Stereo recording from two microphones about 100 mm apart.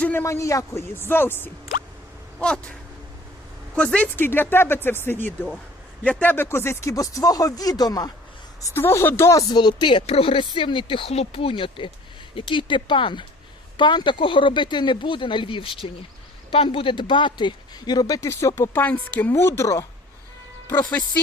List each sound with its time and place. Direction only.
0.0 s speech: 20° left (ahead or behind)
2.4 s a sound: 10° left (ahead or behind)
3.8 s speech: 15° left (ahead or behind); by 8.1 s 40° left (ahead or behind)
8.6 s speech: 25° left (ahead or behind)
9.5 s speech: 45° left (ahead or behind); by 19.8 s 30° left (ahead or behind)
20.7 s speech: 20° left (ahead or behind)